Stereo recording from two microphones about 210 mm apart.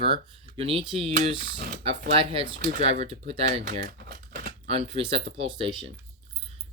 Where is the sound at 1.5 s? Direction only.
45° right (ahead or behind).